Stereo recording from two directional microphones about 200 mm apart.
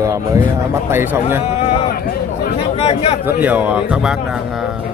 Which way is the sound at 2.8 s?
30° left (ahead or behind).